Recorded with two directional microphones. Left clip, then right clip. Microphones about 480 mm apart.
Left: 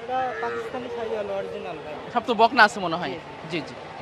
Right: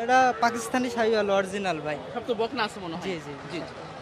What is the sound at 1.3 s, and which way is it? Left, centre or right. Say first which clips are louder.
Speech: right 5 dB; right.